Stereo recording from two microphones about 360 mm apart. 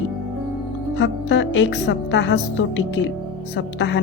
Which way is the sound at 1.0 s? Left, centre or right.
Left.